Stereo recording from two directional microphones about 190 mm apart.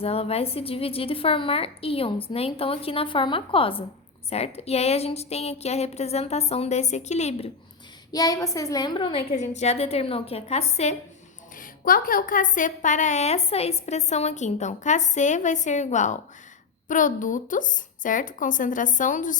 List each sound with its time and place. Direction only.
0.0 s a woman's voice: 30° left (ahead or behind)
8.1 s a woman's voice: 20° left (ahead or behind); by 10.9 s 35° left (ahead or behind)
11.5 s a woman's voice: 45° left (ahead or behind)